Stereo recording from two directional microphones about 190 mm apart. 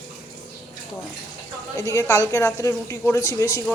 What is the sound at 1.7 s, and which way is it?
A woman's voice, 15° left (ahead or behind).